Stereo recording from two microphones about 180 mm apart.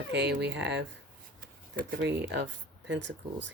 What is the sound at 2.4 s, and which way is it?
Speech, 80° right.